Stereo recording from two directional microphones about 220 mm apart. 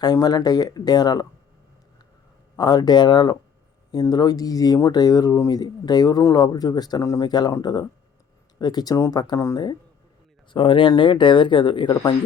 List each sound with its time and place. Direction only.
0.0 s speech: 15° left (ahead or behind)
2.6 s speech: 20° left (ahead or behind)